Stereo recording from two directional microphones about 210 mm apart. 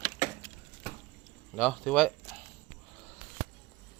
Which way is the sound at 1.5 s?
5° left (ahead or behind).